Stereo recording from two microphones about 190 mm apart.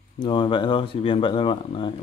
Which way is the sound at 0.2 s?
25° left (ahead or behind).